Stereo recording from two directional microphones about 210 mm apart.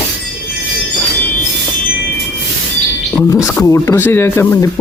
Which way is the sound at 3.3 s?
15° left (ahead or behind).